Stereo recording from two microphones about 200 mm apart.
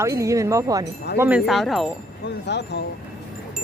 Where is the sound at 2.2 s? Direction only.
60° left (ahead or behind).